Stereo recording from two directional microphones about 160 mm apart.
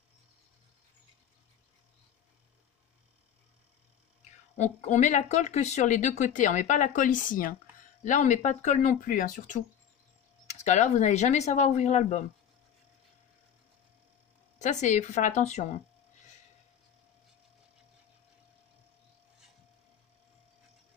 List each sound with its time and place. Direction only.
4.2 s speech: 50° left (ahead or behind)
14.6 s speech: 50° left (ahead or behind)